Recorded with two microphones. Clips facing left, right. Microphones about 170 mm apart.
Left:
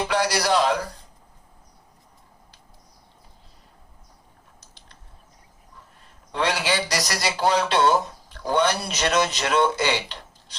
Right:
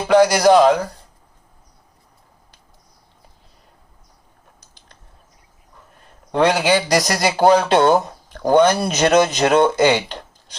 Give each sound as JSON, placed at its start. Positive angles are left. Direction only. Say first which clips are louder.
{"t": 0.1, "sound": "speech", "louder": "right 13 dB", "side_deg": -45}
{"t": 4.6, "sound": "mechanisms", "louder": "right 1 dB", "side_deg": -45}
{"t": 6.3, "sound": "speech", "louder": "right 8 dB", "side_deg": -50}